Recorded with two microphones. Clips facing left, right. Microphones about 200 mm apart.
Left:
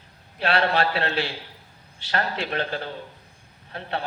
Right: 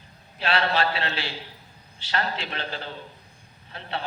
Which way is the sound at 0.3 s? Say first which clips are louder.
Left 2 dB; 55° left (ahead or behind).